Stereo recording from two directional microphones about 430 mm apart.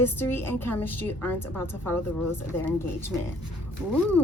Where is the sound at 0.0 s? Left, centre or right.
Centre.